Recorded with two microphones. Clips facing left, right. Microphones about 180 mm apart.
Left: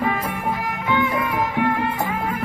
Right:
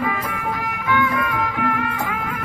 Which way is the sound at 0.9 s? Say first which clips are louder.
Right 1 dB; 25° left (ahead or behind).